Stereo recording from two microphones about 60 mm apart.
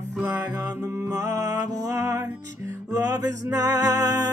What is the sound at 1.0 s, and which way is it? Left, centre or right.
Music, right.